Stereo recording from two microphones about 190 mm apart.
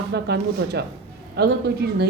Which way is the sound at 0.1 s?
60° right (ahead or behind).